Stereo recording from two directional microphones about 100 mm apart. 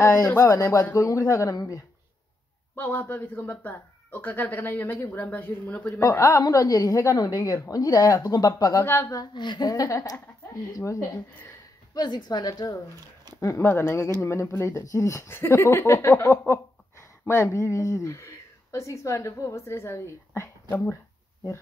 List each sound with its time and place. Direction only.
0.0 s a woman's voice: 35° left (ahead or behind)
2.7 s speech: 20° left (ahead or behind)
6.0 s a woman's voice: 30° left (ahead or behind)
8.8 s speech: 25° left (ahead or behind)
9.1 s a woman's voice: 45° left (ahead or behind)
11.9 s a woman's voice: 45° left (ahead or behind)
13.4 s speech: 25° left (ahead or behind)